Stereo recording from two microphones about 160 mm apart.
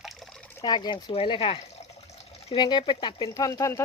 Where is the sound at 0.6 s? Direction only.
25° left (ahead or behind).